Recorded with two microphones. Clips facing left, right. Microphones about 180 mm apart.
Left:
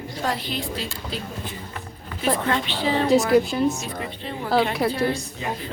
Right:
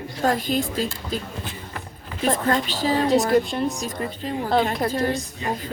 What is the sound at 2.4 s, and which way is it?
Speech, 40° right (ahead or behind).